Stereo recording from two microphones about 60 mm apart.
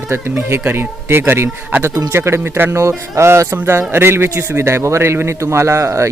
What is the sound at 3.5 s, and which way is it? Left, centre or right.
Speech, right.